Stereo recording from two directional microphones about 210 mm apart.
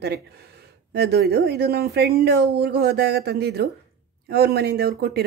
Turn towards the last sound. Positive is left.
turn(degrees=-50)  # may be behind; listen again after turning